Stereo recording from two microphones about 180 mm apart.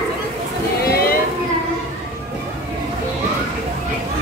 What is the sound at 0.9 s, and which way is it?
Boat, 60° left (ahead or behind).